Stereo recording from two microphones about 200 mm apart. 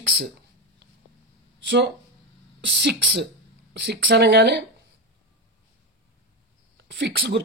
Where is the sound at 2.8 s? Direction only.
55° right (ahead or behind).